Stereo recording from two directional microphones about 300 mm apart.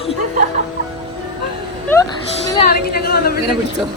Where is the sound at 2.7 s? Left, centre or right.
Left.